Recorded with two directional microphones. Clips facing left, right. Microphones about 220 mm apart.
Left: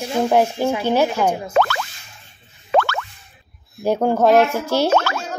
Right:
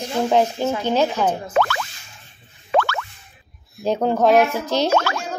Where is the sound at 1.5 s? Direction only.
40° left (ahead or behind).